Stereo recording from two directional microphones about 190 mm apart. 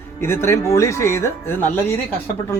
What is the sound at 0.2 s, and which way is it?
A man's voice, 15° left (ahead or behind).